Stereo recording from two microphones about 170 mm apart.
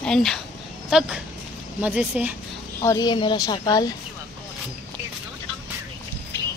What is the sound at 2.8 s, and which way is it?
A woman's voice, 20° left (ahead or behind).